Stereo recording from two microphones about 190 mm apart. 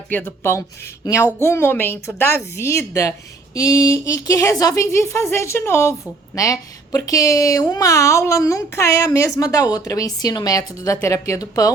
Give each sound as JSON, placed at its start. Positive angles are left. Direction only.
{"t": 0.1, "sound": "a woman's voice", "side_deg": 10}